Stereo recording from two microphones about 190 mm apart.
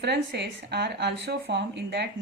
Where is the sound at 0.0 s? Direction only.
60° right (ahead or behind).